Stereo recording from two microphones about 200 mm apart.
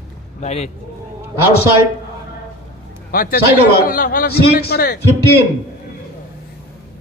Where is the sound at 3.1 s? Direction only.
45° left (ahead or behind).